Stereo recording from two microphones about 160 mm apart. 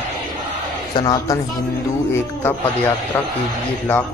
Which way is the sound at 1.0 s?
20° left (ahead or behind).